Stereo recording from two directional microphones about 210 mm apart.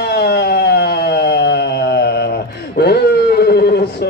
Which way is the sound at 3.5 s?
50° left (ahead or behind).